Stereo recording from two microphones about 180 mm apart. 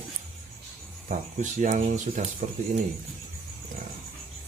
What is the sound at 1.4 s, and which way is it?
Speech, 45° right (ahead or behind).